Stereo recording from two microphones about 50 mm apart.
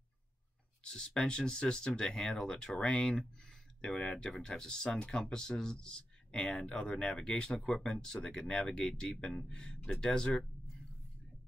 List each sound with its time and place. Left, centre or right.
0.8 s speech: centre